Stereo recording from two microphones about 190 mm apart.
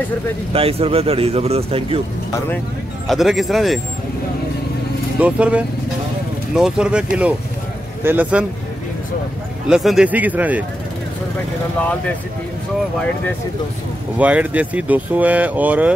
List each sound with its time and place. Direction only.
0.5 s speech: 30° right (ahead or behind)
3.1 s speech: centre (ahead or behind)
5.2 s speech: 5° right (ahead or behind)
9.7 s speech: 5° right (ahead or behind)
14.1 s speech: 10° right (ahead or behind)